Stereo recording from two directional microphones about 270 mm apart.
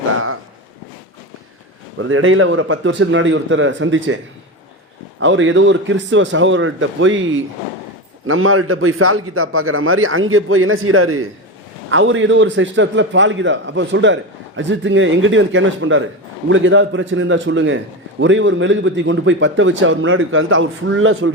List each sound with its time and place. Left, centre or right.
2.0 s a man's voice: right
5.2 s a man's voice: right